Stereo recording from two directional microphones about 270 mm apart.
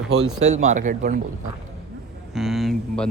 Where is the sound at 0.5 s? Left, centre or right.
Right.